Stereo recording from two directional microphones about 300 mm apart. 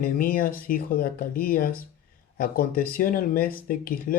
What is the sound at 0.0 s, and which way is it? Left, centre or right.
Speech, left.